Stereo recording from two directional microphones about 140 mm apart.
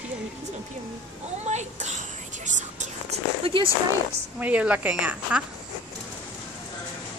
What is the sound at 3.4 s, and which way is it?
Speech, 40° right (ahead or behind).